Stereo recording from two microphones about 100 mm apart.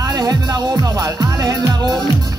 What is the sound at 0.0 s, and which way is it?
Speech, 40° right (ahead or behind).